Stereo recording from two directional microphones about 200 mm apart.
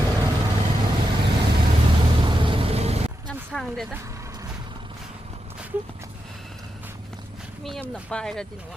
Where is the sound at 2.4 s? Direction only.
25° right (ahead or behind).